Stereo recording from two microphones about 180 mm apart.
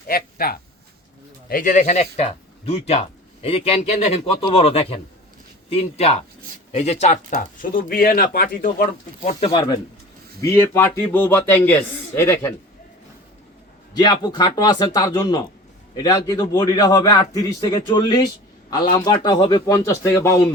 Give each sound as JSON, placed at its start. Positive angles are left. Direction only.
{"t": 0.1, "sound": "a man's voice", "side_deg": 55}
{"t": 7.3, "sound": "speech", "side_deg": 50}
{"t": 9.2, "sound": "a man's voice", "side_deg": 30}
{"t": 10.4, "sound": "a man's voice", "side_deg": 15}
{"t": 13.9, "sound": "a man's voice", "side_deg": 25}